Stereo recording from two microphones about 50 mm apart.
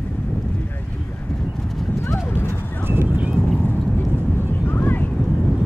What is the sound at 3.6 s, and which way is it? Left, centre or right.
Vehicle, left.